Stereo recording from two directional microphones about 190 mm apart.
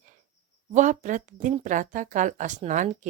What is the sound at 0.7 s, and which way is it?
Speech, 40° right (ahead or behind).